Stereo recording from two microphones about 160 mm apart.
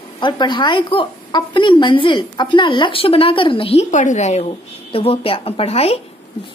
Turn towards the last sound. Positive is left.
turn(degrees=40)  # may be behind; listen again after turning